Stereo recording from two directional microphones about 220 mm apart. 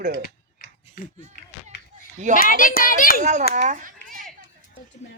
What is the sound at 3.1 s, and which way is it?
Speech, 35° right (ahead or behind).